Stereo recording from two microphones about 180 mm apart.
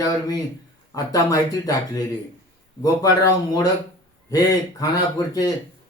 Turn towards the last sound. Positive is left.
turn(degrees=20)  # may be behind; listen again after turning